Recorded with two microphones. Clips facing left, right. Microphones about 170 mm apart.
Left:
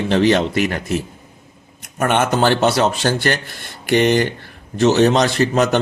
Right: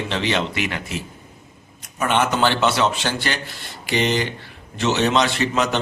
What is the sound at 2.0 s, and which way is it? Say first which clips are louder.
Speech: left 3 dB; 50° left (ahead or behind).